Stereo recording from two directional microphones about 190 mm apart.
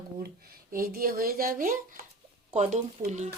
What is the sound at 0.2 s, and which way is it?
Speech, 55° right (ahead or behind).